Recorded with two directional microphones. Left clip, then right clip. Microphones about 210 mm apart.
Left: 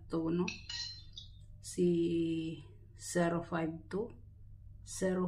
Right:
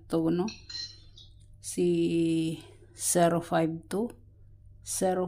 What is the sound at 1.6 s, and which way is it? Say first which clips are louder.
Speech: right 5 dB; 45° right (ahead or behind).